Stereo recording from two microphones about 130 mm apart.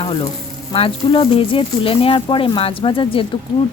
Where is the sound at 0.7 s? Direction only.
45° left (ahead or behind).